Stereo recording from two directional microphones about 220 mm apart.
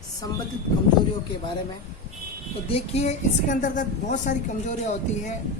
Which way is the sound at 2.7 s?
30° left (ahead or behind).